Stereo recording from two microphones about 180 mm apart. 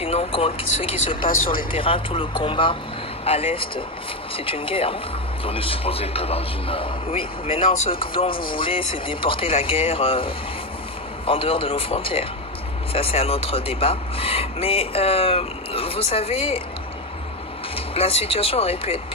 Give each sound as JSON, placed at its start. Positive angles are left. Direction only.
{"t": 0.0, "sound": "speech", "side_deg": 30}
{"t": 1.3, "sound": "speech", "side_deg": 50}
{"t": 1.7, "sound": "speech", "side_deg": 30}
{"t": 17.7, "sound": "speech", "side_deg": 35}